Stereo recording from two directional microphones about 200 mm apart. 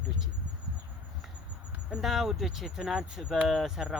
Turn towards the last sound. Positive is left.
turn(degrees=0)  # may be behind; listen again after turning